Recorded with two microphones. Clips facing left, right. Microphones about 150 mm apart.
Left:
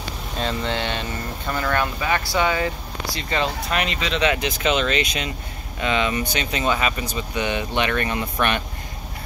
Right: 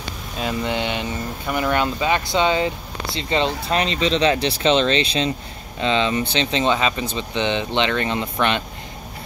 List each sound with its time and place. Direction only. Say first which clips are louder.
0.4 s speech: right 2 dB; 15° right (ahead or behind)